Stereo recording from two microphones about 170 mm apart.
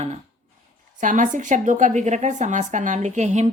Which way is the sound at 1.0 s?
50° right (ahead or behind).